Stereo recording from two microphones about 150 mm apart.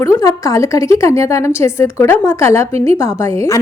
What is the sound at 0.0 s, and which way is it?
A woman's voice, 20° left (ahead or behind).